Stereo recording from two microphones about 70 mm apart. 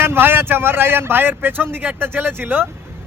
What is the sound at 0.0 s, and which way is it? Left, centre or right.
A man's voice, right.